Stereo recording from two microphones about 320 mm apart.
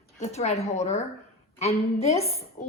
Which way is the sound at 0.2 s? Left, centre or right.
Left.